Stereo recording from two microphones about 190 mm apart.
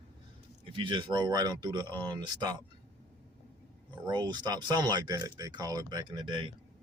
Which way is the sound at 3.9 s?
25° right (ahead or behind).